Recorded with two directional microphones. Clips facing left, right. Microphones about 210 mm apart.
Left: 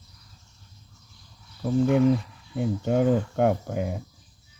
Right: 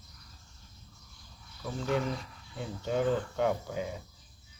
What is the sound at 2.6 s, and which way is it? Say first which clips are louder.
Speech: left 8 dB; 55° left (ahead or behind).